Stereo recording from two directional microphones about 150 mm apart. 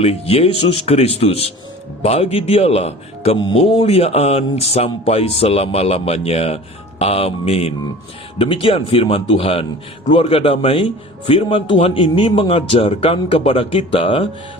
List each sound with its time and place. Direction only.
0.0 s a man's voice: 40° left (ahead or behind)